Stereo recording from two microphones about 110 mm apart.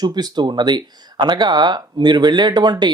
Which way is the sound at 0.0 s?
35° right (ahead or behind).